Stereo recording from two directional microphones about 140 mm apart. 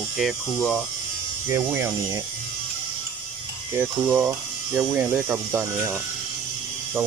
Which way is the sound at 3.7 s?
15° right (ahead or behind).